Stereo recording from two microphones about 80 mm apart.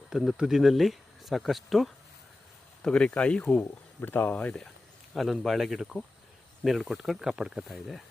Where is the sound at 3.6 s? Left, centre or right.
Left.